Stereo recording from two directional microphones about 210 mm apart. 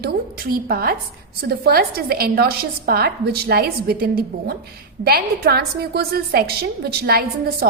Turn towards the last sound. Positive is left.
turn(degrees=-45)  # may be behind; listen again after turning